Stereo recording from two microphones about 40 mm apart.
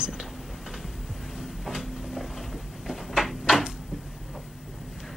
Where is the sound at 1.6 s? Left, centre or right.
Centre.